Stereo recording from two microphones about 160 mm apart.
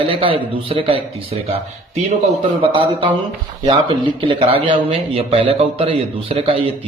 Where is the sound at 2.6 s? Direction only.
30° right (ahead or behind).